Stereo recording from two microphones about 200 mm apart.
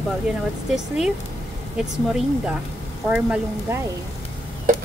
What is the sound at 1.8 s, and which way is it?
Speech, 5° right (ahead or behind).